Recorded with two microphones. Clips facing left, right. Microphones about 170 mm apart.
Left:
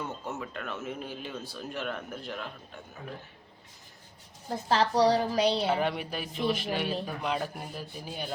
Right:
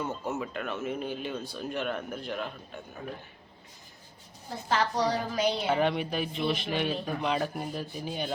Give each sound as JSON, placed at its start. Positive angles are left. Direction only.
{"t": 0.3, "sound": "speech", "side_deg": -5}
{"t": 4.4, "sound": "a woman's voice", "side_deg": 35}
{"t": 5.7, "sound": "speech", "side_deg": 5}